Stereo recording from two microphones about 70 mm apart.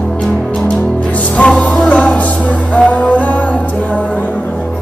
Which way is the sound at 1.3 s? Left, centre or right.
Centre.